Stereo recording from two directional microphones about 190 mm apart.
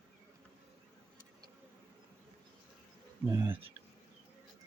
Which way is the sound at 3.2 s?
15° right (ahead or behind).